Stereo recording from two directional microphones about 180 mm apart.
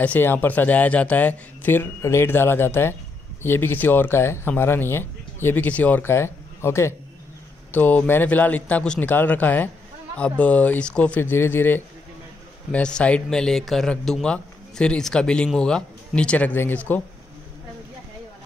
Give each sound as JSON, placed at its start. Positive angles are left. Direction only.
{"t": 0.0, "sound": "a man's voice", "side_deg": 10}